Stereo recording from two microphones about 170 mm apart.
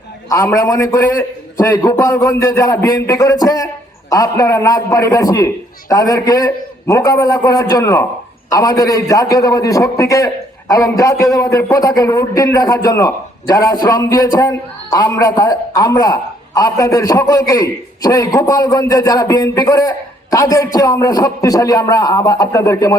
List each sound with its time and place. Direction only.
0.3 s a man's voice: 20° left (ahead or behind)